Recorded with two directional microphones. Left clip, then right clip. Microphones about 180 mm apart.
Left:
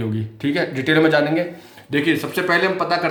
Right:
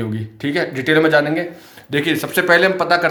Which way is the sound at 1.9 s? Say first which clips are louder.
Right 2 dB; 35° right (ahead or behind).